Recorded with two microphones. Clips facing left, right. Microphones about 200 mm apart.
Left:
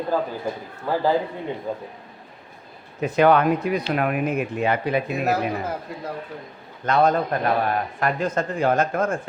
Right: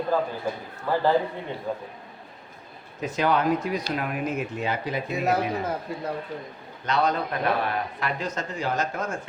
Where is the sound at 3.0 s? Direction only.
60° left (ahead or behind).